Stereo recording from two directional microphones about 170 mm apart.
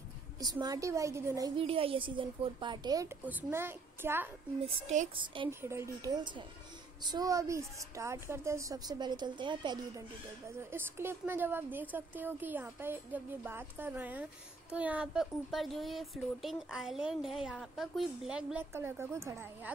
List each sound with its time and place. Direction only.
0.4 s a woman's voice: 25° right (ahead or behind)
1.6 s a woman's voice: 35° right (ahead or behind)
3.3 s speech: 10° right (ahead or behind)
4.6 s speech: 35° right (ahead or behind)
5.5 s a woman's voice: 15° right (ahead or behind)
10.7 s speech: 15° right (ahead or behind)